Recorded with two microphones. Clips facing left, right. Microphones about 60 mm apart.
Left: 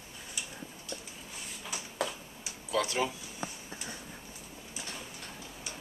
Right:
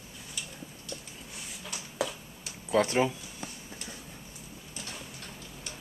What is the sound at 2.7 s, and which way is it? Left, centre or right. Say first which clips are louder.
Speech: right 5 dB; right.